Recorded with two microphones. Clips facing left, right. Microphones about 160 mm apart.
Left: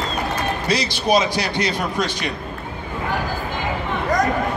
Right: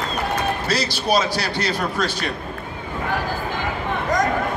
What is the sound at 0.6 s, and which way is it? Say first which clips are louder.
Speech: left 5 dB; 10° left (ahead or behind).